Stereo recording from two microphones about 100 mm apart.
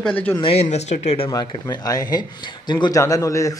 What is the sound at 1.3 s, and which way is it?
Speech, 40° left (ahead or behind).